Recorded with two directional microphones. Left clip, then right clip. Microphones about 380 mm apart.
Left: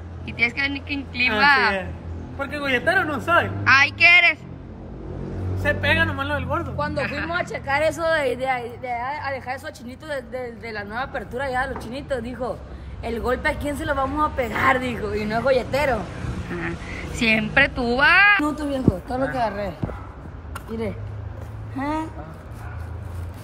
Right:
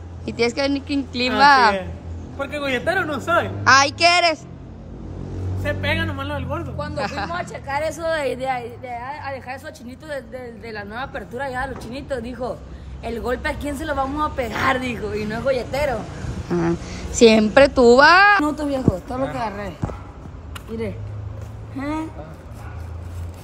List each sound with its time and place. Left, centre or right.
0.2 s a woman's voice: centre
5.6 s a woman's voice: centre
7.2 s speech: left
8.0 s a woman's voice: centre
17.2 s a woman's voice: centre
18.4 s a woman's voice: centre
21.7 s a woman's voice: centre